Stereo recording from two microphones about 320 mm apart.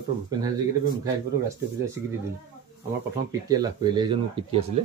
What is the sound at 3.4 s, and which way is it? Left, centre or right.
Speech, centre.